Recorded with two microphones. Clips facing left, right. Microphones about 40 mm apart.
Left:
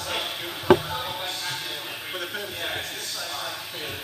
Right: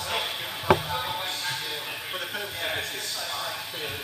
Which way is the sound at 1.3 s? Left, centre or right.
Right.